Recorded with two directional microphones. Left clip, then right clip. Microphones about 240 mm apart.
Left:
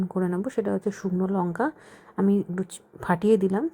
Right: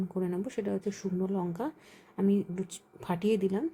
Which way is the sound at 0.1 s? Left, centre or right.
Centre.